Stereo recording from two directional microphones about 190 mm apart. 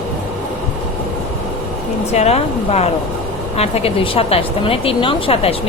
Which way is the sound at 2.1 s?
35° left (ahead or behind).